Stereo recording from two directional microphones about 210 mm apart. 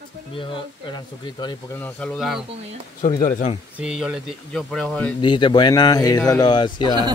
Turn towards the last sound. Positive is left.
turn(degrees=20)  # may be behind; listen again after turning